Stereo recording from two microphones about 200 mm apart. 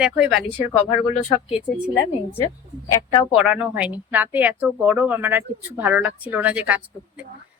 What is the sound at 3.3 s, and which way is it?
Speech, 5° right (ahead or behind).